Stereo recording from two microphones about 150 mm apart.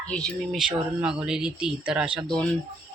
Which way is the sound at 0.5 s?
5° right (ahead or behind).